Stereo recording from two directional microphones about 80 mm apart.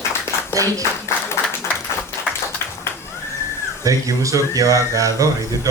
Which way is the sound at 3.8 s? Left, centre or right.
Right.